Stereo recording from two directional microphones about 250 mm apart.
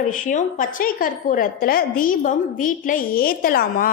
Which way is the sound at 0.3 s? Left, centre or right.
Left.